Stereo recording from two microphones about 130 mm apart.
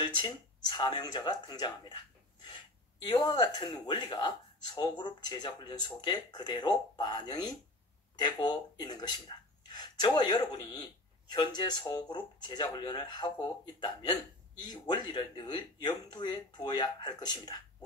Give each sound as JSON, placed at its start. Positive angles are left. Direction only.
{"t": 0.0, "sound": "speech", "side_deg": 35}
{"t": 3.0, "sound": "speech", "side_deg": 35}